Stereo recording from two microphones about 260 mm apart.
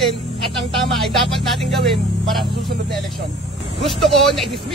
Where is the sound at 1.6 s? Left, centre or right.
Centre.